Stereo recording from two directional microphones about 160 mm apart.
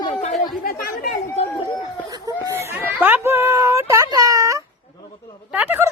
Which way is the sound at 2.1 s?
25° right (ahead or behind).